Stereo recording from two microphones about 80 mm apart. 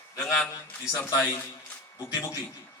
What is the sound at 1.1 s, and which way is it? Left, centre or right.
Speech, left.